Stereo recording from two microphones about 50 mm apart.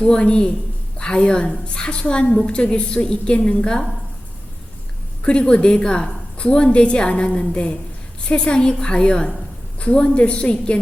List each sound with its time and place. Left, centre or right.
0.0 s a woman's voice: centre
5.2 s a woman's voice: left